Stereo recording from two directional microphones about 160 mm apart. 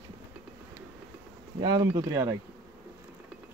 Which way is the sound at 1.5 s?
25° right (ahead or behind).